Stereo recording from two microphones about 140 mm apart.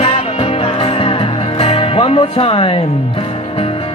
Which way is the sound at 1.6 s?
45° left (ahead or behind).